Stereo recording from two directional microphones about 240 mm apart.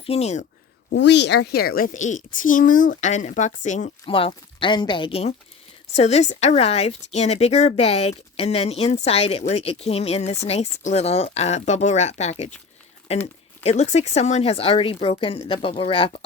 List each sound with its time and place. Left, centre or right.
0.0 s speech: left
0.9 s a woman's voice: left
13.6 s speech: left